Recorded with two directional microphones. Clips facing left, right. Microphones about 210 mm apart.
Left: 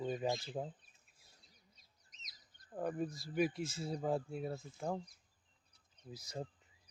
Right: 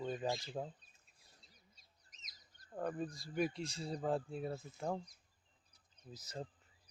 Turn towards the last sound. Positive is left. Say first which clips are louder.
# left 2 dB
turn(degrees=10)  # may be behind; listen again after turning